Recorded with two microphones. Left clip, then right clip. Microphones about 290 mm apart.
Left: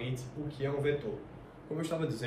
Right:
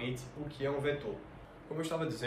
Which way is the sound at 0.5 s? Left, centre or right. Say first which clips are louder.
Left 2 dB; centre.